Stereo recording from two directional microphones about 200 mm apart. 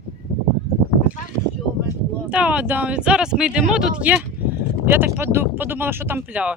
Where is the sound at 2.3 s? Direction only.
5° right (ahead or behind).